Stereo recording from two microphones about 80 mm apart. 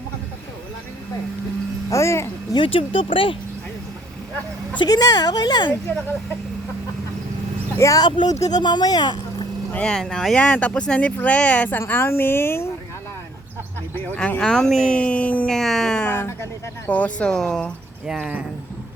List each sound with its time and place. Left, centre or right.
1.9 s a child's voice: left
2.6 s speech: left
4.9 s speech: left
7.8 s speech: left
8.0 s speech: left
8.3 s speech: left
9.7 s speech: centre
11.9 s speech: left
14.1 s speech: centre
15.4 s speech: centre
16.0 s speech: left
17.3 s speech: centre
18.0 s speech: centre